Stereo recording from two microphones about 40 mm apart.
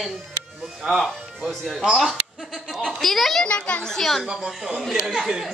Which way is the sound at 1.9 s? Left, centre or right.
Centre.